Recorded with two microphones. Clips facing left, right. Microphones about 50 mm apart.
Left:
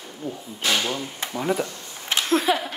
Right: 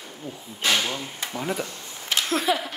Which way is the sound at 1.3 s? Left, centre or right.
Centre.